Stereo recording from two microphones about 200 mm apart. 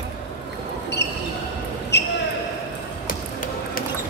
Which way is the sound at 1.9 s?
60° left (ahead or behind).